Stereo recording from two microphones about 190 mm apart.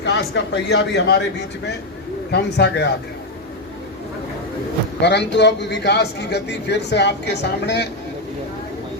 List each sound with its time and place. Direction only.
0.0 s a man's voice: 65° left (ahead or behind)
2.3 s a man's voice: 60° left (ahead or behind)
5.0 s a man's voice: 65° left (ahead or behind)